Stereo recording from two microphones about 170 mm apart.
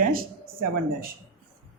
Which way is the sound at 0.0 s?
55° right (ahead or behind).